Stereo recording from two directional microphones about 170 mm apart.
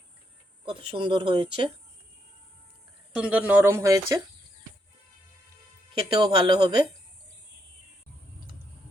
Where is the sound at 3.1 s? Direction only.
5° right (ahead or behind).